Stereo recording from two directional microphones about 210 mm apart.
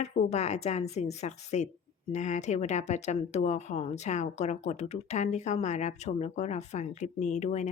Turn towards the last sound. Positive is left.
turn(degrees=35)  # may be behind; listen again after turning